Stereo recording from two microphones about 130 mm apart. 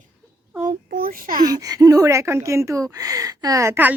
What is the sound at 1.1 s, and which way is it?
Speech, 90° right.